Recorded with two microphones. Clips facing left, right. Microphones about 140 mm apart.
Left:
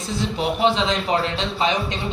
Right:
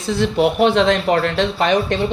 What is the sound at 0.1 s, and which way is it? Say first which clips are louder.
Speech: right 7 dB; 65° right (ahead or behind).